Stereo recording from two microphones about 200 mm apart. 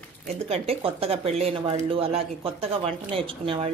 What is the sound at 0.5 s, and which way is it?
A woman's voice, 30° right (ahead or behind).